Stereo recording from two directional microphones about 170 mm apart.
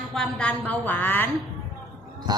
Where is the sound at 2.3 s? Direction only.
25° right (ahead or behind).